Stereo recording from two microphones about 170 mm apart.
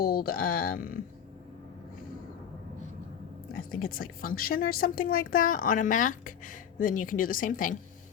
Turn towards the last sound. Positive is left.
turn(degrees=50)  # may be behind; listen again after turning